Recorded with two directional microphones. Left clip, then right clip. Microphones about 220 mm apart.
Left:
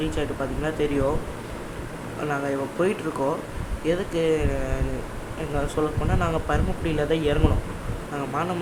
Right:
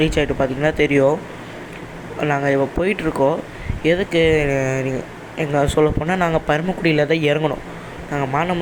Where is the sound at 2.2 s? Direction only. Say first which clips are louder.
Right 9 dB; 20° right (ahead or behind).